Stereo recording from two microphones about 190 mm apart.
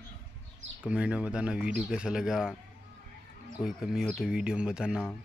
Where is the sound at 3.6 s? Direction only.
5° right (ahead or behind).